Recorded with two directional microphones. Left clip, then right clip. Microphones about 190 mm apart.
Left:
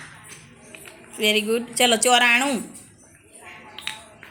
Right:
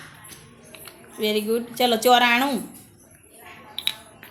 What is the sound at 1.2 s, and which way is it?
A woman's voice, 5° left (ahead or behind).